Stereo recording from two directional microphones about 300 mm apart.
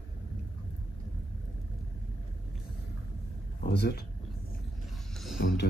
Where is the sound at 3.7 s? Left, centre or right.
Left.